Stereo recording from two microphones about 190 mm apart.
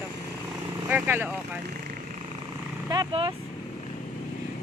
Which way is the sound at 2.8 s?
20° right (ahead or behind).